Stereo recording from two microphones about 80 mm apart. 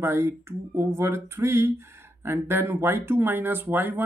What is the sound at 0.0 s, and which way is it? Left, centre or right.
Speech, right.